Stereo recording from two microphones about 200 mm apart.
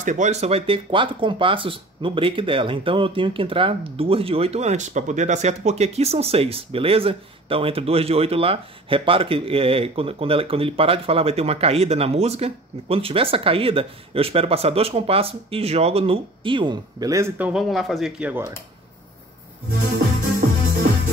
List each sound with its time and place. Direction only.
0.0 s speech: 35° right (ahead or behind); by 18.5 s 10° right (ahead or behind)